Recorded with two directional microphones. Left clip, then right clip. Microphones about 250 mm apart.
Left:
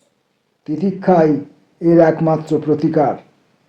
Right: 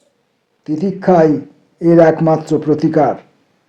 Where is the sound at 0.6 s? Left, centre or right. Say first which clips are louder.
Right 2 dB; right.